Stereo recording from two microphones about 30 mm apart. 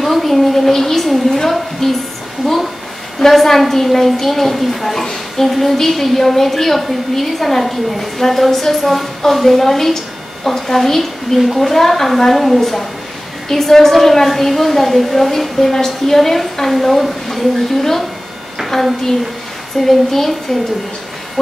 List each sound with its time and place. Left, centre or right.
0.0 s a woman's voice: centre
19.8 s a woman's voice: centre